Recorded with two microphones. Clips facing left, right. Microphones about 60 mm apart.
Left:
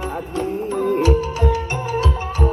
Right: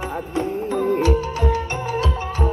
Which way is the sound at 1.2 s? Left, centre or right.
Right.